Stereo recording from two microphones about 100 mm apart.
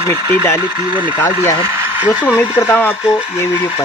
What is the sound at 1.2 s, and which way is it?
Speech, 25° left (ahead or behind).